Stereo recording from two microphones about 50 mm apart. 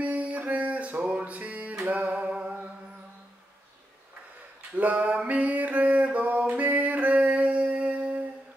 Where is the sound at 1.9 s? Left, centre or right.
Right.